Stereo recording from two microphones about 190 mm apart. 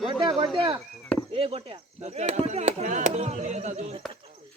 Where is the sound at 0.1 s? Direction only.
25° right (ahead or behind).